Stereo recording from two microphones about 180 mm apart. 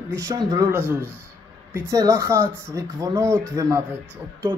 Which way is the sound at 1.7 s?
15° right (ahead or behind).